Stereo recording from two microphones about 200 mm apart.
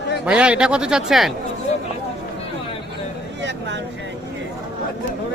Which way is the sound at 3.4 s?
65° right (ahead or behind).